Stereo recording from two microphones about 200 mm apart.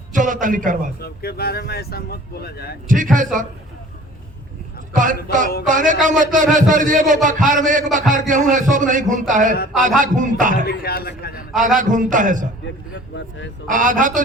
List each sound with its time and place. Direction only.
0.1 s a man's voice: 40° right (ahead or behind)
1.0 s speech: 50° left (ahead or behind)
2.9 s a man's voice: 40° right (ahead or behind)
4.9 s a man's voice: 40° right (ahead or behind)
10.7 s speech: 50° left (ahead or behind)
11.5 s a man's voice: 40° right (ahead or behind)
13.1 s a man's voice: 65° left (ahead or behind)
13.7 s a man's voice: 40° right (ahead or behind)